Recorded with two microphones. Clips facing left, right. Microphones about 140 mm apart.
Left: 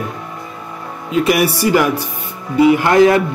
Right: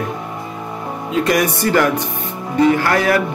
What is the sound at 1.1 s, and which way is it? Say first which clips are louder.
Speech: left 2 dB; 5° left (ahead or behind).